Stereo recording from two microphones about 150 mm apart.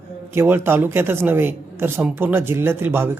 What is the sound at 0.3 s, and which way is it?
A man's voice, 15° right (ahead or behind).